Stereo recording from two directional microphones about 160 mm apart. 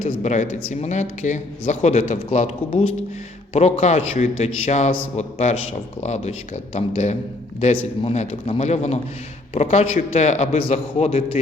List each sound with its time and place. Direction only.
0.2 s speech: 45° left (ahead or behind)